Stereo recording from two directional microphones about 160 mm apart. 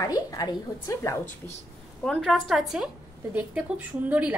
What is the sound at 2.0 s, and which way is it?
A woman's voice, 5° left (ahead or behind).